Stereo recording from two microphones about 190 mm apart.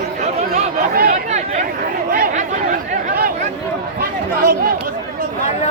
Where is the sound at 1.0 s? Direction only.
40° right (ahead or behind).